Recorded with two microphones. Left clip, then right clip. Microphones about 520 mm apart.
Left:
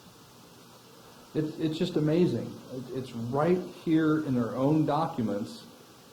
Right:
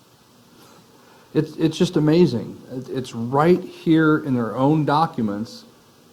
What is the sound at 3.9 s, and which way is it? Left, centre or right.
Speech, right.